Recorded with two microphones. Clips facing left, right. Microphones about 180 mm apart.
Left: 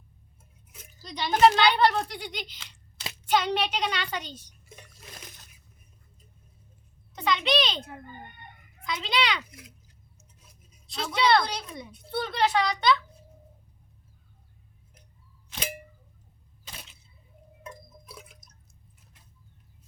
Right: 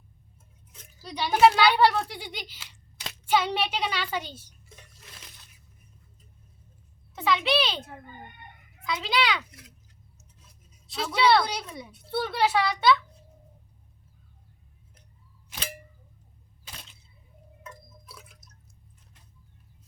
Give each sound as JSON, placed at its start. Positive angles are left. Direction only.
{"t": 1.0, "sound": "a child's voice", "side_deg": -10}
{"t": 4.7, "sound": "water", "side_deg": 15}
{"t": 5.1, "sound": "a sound", "side_deg": 45}
{"t": 7.2, "sound": "a child's voice", "side_deg": -5}
{"t": 9.4, "sound": "a child's voice", "side_deg": 10}
{"t": 10.8, "sound": "speech", "side_deg": -5}
{"t": 17.6, "sound": "water", "side_deg": 15}